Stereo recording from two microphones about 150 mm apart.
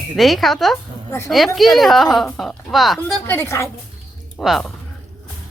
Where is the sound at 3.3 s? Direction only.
15° left (ahead or behind).